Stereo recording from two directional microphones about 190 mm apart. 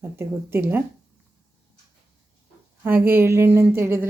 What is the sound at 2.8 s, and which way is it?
Speech, 10° right (ahead or behind).